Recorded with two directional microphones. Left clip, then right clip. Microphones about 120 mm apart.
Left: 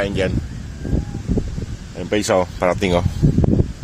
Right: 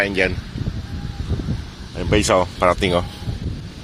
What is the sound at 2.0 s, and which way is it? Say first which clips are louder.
Speech: right 1 dB; 25° left (ahead or behind).